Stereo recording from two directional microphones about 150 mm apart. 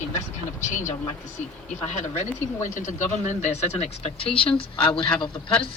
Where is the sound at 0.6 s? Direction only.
55° left (ahead or behind).